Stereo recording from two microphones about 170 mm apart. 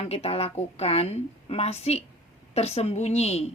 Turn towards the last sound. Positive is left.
turn(degrees=40)  # may be behind; listen again after turning